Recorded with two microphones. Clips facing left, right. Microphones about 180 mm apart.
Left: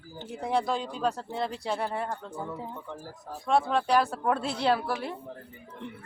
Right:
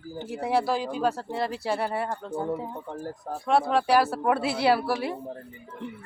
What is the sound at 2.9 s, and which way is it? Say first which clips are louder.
Speech: right 7 dB; 60° right (ahead or behind).